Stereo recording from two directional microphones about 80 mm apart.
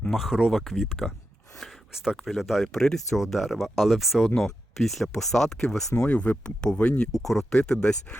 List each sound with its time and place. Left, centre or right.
0.1 s speech: centre
1.5 s a sound: centre
2.1 s speech: centre
6.1 s speech: centre
7.2 s speech: centre